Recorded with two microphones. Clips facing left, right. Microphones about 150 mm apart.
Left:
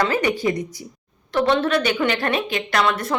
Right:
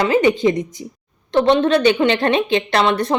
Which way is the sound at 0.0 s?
20° right (ahead or behind).